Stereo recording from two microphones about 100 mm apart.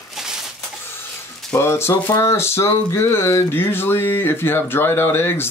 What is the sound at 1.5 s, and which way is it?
Speech, 30° left (ahead or behind).